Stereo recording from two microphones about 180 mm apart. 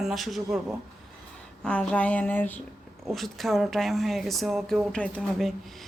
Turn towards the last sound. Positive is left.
turn(degrees=0)  # may be behind; listen again after turning